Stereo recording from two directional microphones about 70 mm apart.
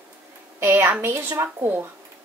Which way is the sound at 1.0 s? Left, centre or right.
Right.